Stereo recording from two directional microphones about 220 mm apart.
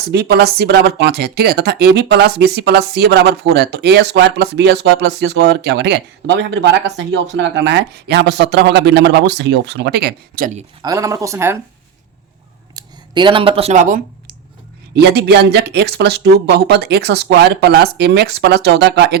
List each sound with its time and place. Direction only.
0.1 s speech: 45° right (ahead or behind)
10.8 s speech: 15° right (ahead or behind)
12.7 s a sound: 20° right (ahead or behind); by 14.3 s 40° right (ahead or behind)
14.9 s speech: 50° right (ahead or behind)